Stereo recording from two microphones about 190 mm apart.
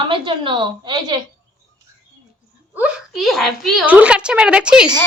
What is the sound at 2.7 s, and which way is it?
A woman's voice, 5° right (ahead or behind).